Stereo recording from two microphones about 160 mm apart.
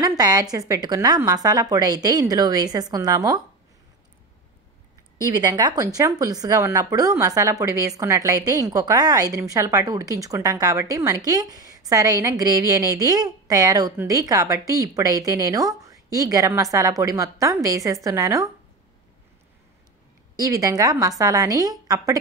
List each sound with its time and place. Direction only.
0.2 s a woman's voice: 25° right (ahead or behind)
5.3 s a woman's voice: 25° right (ahead or behind)
20.3 s a woman's voice: 20° right (ahead or behind)